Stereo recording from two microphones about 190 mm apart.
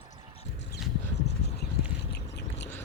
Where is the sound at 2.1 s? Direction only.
65° left (ahead or behind).